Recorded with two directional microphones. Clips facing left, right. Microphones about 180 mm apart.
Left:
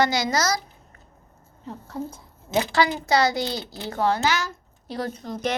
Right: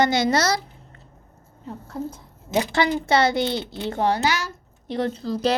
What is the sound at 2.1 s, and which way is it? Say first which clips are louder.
A woman's voice: right 1 dB; 25° right (ahead or behind).